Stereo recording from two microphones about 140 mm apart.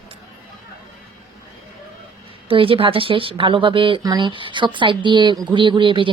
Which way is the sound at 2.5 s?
40° right (ahead or behind).